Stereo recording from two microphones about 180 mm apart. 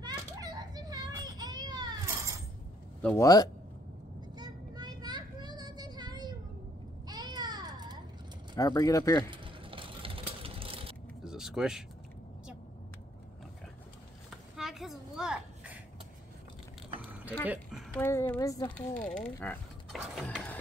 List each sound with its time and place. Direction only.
0.0 s children playing: 20° right (ahead or behind)
3.0 s a woman's voice: 15° left (ahead or behind)
4.4 s vehicle: 20° right (ahead or behind)
7.1 s a sound: 25° right (ahead or behind)
8.5 s speech: 20° left (ahead or behind)
9.3 s vehicle: 30° right (ahead or behind)
11.2 s speech: 5° right (ahead or behind)
14.6 s a sound: centre (ahead or behind)
17.9 s a woman's voice: 10° left (ahead or behind)
19.0 s a sound: 5° left (ahead or behind)